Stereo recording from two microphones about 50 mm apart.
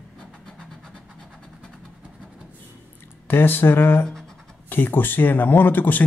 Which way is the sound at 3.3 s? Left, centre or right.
Left.